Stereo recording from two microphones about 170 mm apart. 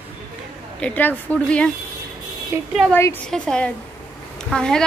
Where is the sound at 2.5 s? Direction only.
15° right (ahead or behind).